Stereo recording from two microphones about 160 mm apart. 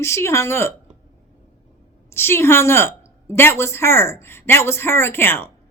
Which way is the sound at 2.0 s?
15° left (ahead or behind).